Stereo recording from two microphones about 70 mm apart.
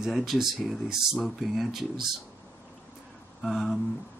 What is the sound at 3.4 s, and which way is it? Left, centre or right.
Speech, centre.